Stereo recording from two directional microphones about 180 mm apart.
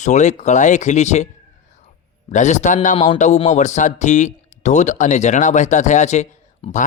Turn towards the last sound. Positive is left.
turn(degrees=30)  # may be behind; listen again after turning